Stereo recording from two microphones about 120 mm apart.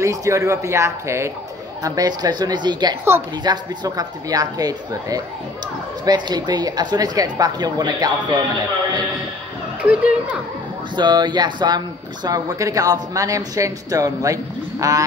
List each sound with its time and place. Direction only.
0.0 s a woman's voice: 25° right (ahead or behind)
9.8 s speech: 10° right (ahead or behind)
11.0 s a woman's voice: 40° right (ahead or behind)